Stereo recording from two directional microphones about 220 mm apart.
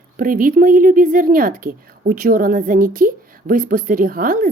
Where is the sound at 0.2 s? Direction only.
40° right (ahead or behind).